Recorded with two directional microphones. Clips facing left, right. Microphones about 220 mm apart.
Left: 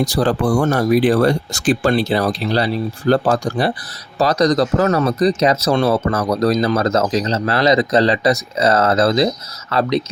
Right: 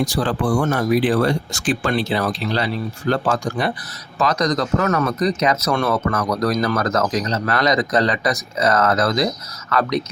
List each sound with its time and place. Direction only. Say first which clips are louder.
0.0 s speech: left 4 dB; 40° left (ahead or behind)